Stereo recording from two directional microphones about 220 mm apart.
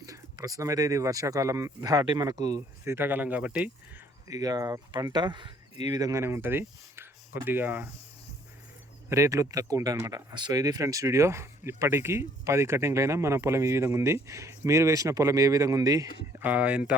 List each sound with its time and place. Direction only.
0.0 s speech: 15° right (ahead or behind)
4.3 s speech: 15° right (ahead or behind)
9.0 s speech: 15° right (ahead or behind)